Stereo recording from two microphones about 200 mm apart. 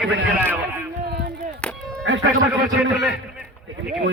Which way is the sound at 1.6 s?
5° left (ahead or behind).